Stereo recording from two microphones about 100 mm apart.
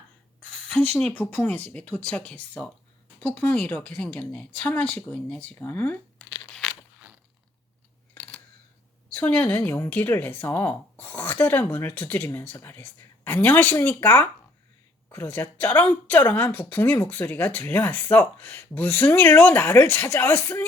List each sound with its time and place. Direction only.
0.9 s speech: 10° left (ahead or behind)
6.5 s crunch: 5° left (ahead or behind)
9.1 s speech: 20° left (ahead or behind)